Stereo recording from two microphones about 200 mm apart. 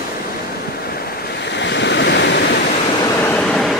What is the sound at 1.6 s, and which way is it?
Waves, 60° left (ahead or behind).